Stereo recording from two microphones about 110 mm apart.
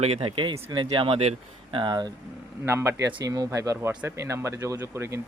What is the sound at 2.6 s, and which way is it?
Speech, 25° right (ahead or behind).